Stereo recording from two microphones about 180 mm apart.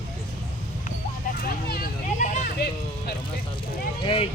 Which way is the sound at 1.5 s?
55° left (ahead or behind).